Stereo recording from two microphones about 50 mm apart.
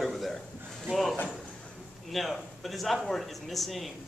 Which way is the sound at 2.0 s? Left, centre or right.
Centre.